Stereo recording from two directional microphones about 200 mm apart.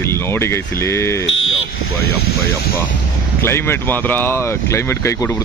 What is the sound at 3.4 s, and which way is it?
Speech, 10° left (ahead or behind).